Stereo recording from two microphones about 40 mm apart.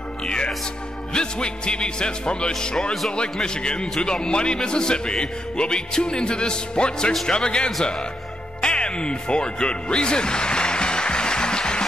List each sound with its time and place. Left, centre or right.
1.1 s speech: left
8.5 s music: left